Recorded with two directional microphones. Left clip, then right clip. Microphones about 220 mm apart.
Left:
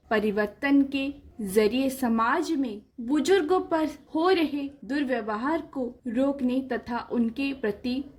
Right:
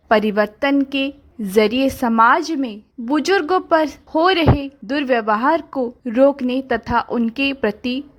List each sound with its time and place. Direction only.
0.1 s a woman's voice: 35° right (ahead or behind)